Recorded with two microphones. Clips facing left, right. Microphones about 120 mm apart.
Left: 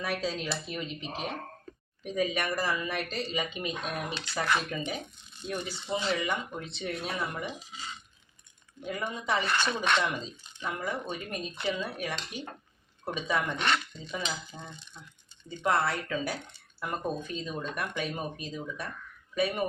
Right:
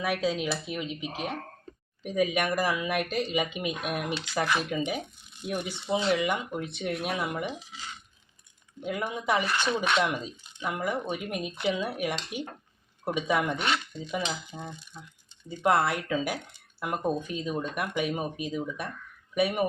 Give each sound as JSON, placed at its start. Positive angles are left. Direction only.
{"t": 0.0, "sound": "speech", "side_deg": -10}
{"t": 8.8, "sound": "speech", "side_deg": -10}